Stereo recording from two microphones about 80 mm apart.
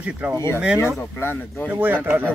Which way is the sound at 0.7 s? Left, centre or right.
Left.